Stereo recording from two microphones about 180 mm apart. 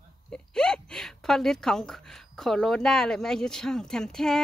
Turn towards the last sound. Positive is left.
turn(degrees=5)  # may be behind; listen again after turning